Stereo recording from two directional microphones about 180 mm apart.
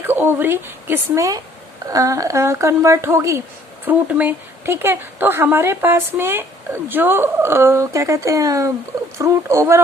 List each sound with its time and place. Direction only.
0.0 s speech: 10° right (ahead or behind)